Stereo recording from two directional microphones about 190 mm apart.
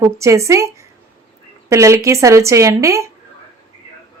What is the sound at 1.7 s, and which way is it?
Speech, 15° right (ahead or behind).